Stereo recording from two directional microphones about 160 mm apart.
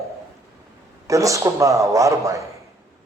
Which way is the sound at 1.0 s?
20° right (ahead or behind).